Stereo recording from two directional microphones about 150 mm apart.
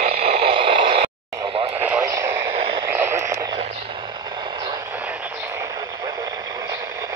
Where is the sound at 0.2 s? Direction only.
40° right (ahead or behind).